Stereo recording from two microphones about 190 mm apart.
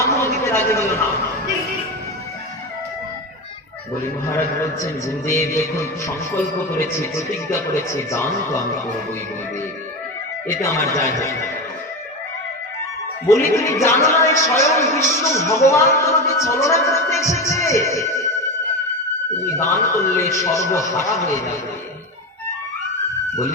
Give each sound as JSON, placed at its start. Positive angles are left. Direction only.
{"t": 0.0, "sound": "a sound", "side_deg": 15}
{"t": 4.3, "sound": "a man's voice", "side_deg": 15}
{"t": 10.4, "sound": "a man's voice", "side_deg": 15}
{"t": 13.2, "sound": "a man's voice", "side_deg": 15}
{"t": 19.5, "sound": "a man's voice", "side_deg": 15}